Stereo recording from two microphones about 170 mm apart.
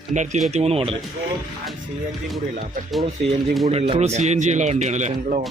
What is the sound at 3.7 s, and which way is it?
A man's voice, 35° right (ahead or behind).